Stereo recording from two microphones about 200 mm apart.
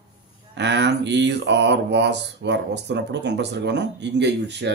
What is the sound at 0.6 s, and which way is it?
Speech, 60° right (ahead or behind).